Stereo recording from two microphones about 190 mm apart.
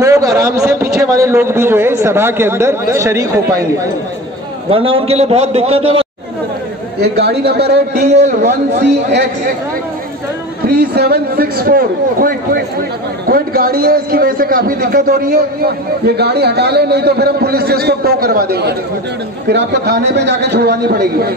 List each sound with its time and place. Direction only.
0.0 s a man's voice: 15° right (ahead or behind)
4.6 s a man's voice: 30° right (ahead or behind)
7.0 s a man's voice: 60° right (ahead or behind)
7.9 s a man's voice: 35° right (ahead or behind)
8.4 s a man's voice: 60° right (ahead or behind)
10.7 s a man's voice: 60° right (ahead or behind)